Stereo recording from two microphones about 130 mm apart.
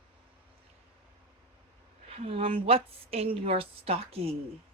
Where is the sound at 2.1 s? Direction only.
50° right (ahead or behind).